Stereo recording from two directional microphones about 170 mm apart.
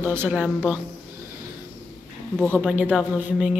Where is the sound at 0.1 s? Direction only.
10° right (ahead or behind).